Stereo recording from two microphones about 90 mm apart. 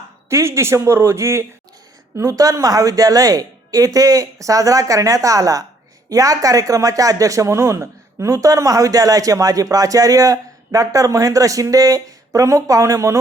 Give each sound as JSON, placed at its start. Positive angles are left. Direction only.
{"t": 0.3, "sound": "speech", "side_deg": -30}